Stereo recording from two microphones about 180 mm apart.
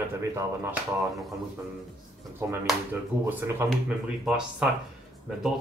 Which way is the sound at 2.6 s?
10° right (ahead or behind).